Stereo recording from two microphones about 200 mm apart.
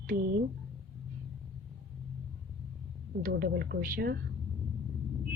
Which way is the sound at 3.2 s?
50° right (ahead or behind).